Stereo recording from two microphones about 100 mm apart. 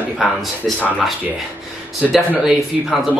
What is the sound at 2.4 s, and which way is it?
Speech, 5° right (ahead or behind).